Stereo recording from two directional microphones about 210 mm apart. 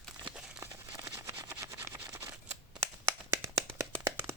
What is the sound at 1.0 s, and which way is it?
Vehicle, 15° right (ahead or behind).